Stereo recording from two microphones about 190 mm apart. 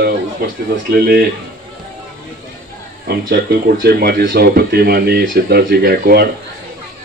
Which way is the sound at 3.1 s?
55° right (ahead or behind).